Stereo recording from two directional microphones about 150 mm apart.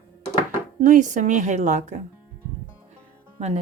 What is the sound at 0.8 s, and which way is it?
Speech, 55° right (ahead or behind).